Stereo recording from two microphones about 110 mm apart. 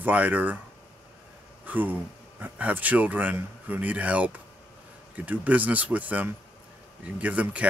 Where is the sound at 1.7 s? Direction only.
15° right (ahead or behind).